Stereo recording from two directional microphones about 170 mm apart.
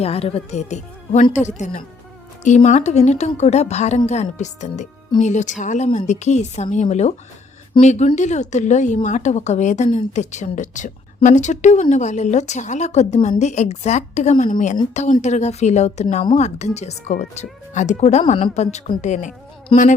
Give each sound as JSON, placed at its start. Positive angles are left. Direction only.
{"t": 0.0, "sound": "a woman's voice", "side_deg": 35}
{"t": 19.7, "sound": "speech", "side_deg": 35}